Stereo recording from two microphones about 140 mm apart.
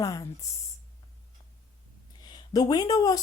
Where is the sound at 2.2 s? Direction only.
30° left (ahead or behind).